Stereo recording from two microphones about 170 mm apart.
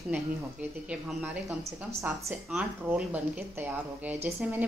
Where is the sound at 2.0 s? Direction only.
10° right (ahead or behind).